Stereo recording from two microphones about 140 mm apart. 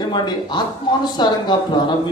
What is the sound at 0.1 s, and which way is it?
A man's voice, 30° left (ahead or behind).